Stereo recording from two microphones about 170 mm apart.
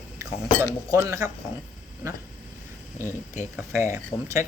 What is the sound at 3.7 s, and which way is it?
Speech, 15° right (ahead or behind).